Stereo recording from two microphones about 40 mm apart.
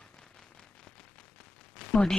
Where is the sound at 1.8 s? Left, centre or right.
Left.